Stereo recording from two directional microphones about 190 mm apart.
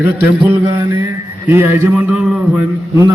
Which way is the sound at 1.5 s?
10° right (ahead or behind).